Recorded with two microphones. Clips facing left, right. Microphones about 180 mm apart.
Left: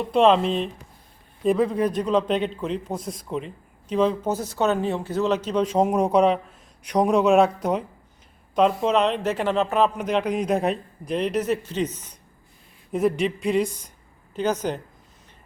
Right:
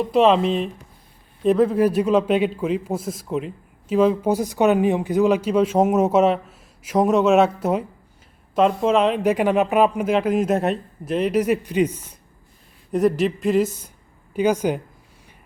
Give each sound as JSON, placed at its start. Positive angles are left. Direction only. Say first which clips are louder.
{"t": 0.0, "sound": "speech", "louder": "right 2 dB", "side_deg": -5}
{"t": 12.9, "sound": "speech", "louder": "right 3 dB", "side_deg": 0}